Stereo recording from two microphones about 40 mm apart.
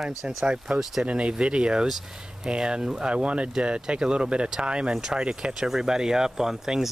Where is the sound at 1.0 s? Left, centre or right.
Right.